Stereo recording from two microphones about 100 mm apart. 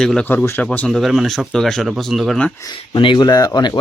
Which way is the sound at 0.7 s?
5° left (ahead or behind).